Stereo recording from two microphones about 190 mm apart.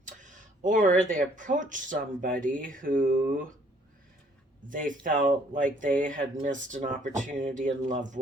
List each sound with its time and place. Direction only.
0.0 s speech: 40° right (ahead or behind)
4.7 s speech: 45° right (ahead or behind)